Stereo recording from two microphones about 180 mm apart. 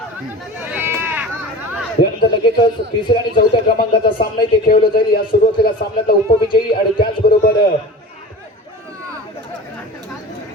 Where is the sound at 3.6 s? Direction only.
55° left (ahead or behind).